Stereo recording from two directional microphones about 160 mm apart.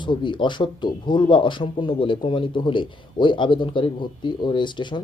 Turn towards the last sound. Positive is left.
turn(degrees=30)  # may be behind; listen again after turning